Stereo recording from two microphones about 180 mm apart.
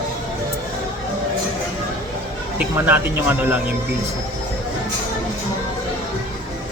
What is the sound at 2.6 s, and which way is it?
Speech, 10° right (ahead or behind).